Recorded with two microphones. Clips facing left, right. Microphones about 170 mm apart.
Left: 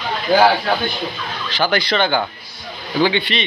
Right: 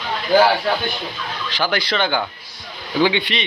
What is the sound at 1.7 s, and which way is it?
Speech, 5° right (ahead or behind).